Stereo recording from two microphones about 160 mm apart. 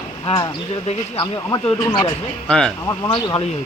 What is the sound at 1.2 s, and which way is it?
Speech, 25° left (ahead or behind).